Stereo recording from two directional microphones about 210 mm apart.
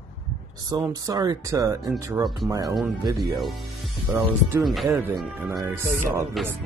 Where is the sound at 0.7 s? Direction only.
15° right (ahead or behind).